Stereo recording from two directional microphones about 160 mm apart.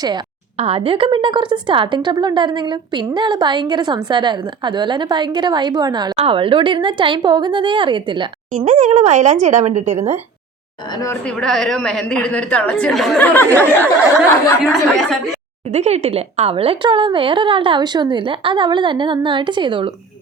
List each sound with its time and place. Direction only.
0.5 s a woman's voice: 40° right (ahead or behind)
8.5 s speech: 45° right (ahead or behind)
10.9 s a woman's voice: 20° left (ahead or behind)
11.3 s a woman's voice: 5° left (ahead or behind)
15.7 s speech: 40° right (ahead or behind)